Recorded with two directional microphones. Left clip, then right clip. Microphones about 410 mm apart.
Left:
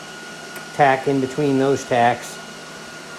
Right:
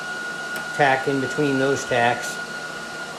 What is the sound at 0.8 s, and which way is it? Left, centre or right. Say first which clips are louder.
Speech: left 3 dB; centre.